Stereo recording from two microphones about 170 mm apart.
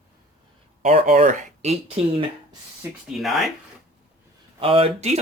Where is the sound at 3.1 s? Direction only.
Centre (ahead or behind).